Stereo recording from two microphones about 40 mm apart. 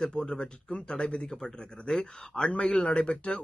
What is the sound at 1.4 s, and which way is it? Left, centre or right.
Speech, centre.